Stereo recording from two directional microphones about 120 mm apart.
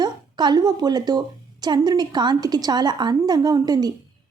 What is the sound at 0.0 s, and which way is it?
A woman's voice, 35° right (ahead or behind).